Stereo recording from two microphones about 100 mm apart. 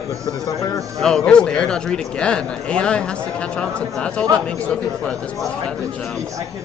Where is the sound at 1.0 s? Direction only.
5° left (ahead or behind).